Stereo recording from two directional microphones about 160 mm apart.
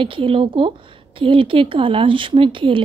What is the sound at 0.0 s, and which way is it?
Speech, 35° right (ahead or behind).